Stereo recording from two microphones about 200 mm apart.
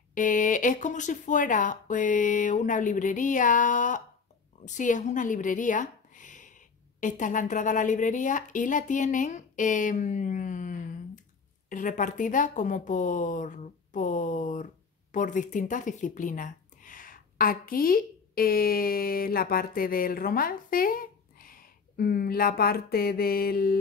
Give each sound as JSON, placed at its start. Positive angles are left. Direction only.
{"t": 0.1, "sound": "speech", "side_deg": 40}